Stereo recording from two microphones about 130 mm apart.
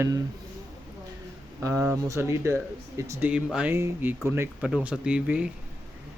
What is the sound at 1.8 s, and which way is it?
Speech, 20° right (ahead or behind).